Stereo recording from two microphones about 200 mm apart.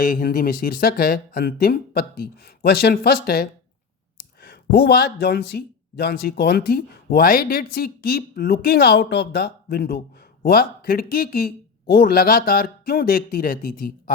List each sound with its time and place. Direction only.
0.0 s speech: 45° left (ahead or behind)